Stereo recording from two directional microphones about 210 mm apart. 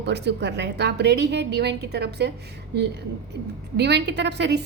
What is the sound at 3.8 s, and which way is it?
Speech, 55° right (ahead or behind).